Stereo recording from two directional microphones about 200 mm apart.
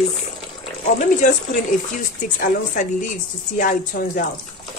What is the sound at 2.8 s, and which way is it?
A woman's voice, 40° left (ahead or behind).